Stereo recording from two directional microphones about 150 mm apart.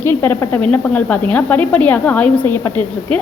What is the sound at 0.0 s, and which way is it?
A woman's voice, 15° left (ahead or behind).